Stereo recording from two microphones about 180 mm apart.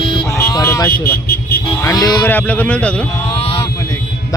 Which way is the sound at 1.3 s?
60° left (ahead or behind).